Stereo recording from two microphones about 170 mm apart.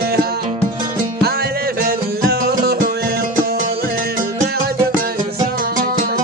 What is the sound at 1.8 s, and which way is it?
Music, 60° right (ahead or behind).